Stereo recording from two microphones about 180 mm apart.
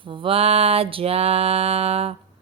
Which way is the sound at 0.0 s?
30° right (ahead or behind).